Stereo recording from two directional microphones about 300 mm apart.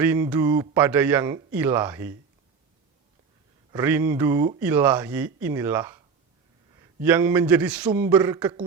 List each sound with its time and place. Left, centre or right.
0.0 s speech: centre
3.7 s speech: centre